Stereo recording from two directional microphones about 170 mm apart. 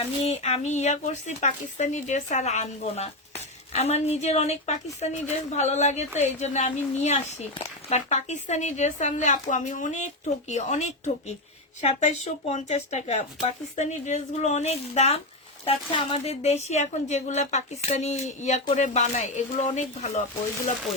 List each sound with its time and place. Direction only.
0.2 s speech: 40° left (ahead or behind)